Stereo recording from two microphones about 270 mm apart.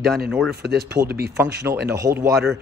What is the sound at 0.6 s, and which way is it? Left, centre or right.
Speech, right.